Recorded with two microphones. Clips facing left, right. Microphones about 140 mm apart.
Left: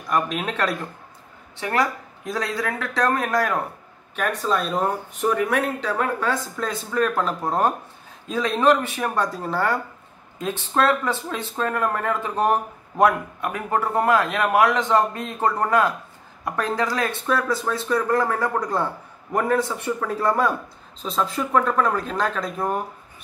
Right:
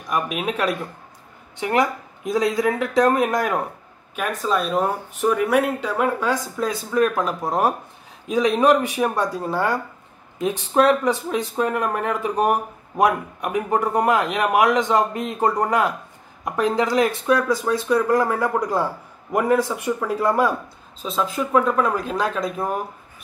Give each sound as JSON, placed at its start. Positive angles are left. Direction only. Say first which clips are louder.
{"t": 0.1, "sound": "speech", "louder": "even", "side_deg": -10}
{"t": 4.1, "sound": "speech", "louder": "right 1 dB", "side_deg": -5}
{"t": 17.3, "sound": "speech", "louder": "right 4 dB", "side_deg": 0}
{"t": 18.1, "sound": "speech", "louder": "right 2 dB", "side_deg": -10}